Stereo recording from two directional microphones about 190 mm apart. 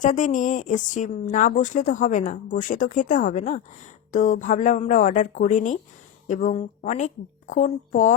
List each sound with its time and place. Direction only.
0.0 s a woman's voice: 40° left (ahead or behind)